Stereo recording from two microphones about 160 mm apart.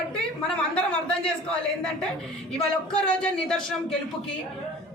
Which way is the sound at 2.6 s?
5° left (ahead or behind).